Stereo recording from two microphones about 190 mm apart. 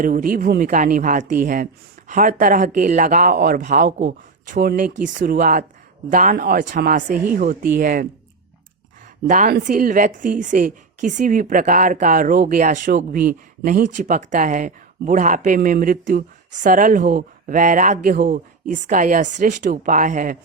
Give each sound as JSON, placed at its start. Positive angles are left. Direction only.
{"t": 0.0, "sound": "a woman's voice", "side_deg": -45}
{"t": 9.2, "sound": "a woman's voice", "side_deg": -45}